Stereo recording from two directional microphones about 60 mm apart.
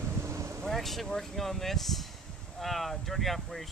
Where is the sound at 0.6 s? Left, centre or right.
Centre.